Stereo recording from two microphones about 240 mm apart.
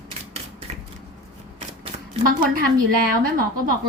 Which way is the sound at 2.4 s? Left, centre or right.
Right.